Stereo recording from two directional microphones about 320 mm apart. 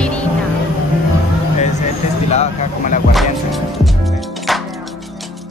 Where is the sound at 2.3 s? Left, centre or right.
Left.